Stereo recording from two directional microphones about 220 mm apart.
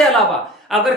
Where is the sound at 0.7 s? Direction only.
Centre (ahead or behind).